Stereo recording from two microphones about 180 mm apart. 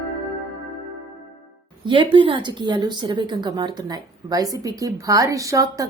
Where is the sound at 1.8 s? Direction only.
25° right (ahead or behind).